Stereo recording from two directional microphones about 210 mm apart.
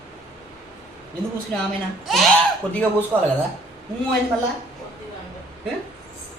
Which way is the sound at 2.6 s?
5° left (ahead or behind).